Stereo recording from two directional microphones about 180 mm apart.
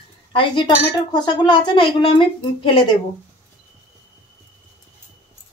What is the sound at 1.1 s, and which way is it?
A woman's voice, 25° left (ahead or behind).